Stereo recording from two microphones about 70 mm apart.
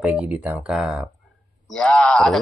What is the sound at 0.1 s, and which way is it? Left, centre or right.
Speech, right.